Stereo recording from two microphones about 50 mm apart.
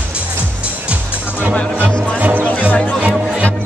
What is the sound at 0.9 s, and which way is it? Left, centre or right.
Music, right.